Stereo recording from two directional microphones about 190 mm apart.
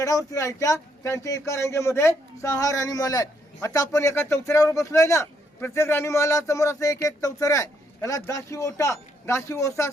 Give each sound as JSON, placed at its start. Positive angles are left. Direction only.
{"t": 0.0, "sound": "a man's voice", "side_deg": 15}